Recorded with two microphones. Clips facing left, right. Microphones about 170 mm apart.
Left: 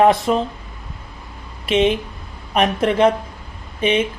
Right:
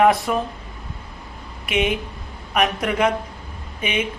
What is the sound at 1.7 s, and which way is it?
Speech, 30° left (ahead or behind).